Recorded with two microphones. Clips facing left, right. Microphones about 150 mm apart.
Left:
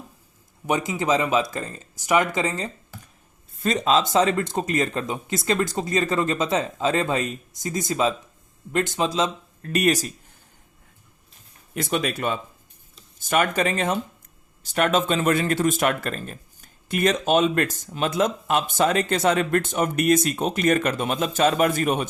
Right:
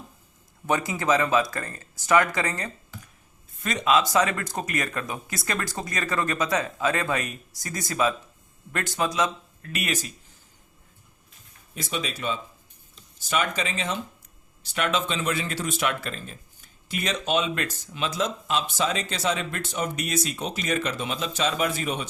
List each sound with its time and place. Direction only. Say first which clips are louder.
0.7 s speech: left 1 dB; 20° left (ahead or behind)
3.6 s speech: left 2 dB; 30° left (ahead or behind)
9.6 s speech: left 9 dB; 40° left (ahead or behind)
11.7 s speech: left 7 dB; 55° left (ahead or behind)